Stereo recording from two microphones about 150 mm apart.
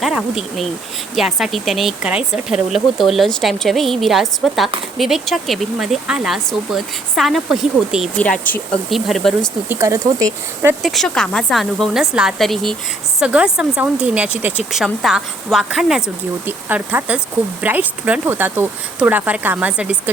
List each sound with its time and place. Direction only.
0.0 s speech: centre (ahead or behind)
9.6 s speech: 20° right (ahead or behind)
10.8 s speech: centre (ahead or behind)